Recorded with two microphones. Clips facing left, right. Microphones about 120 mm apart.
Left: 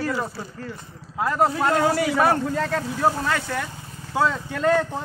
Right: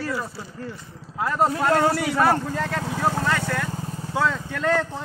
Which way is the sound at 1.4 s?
Centre (ahead or behind).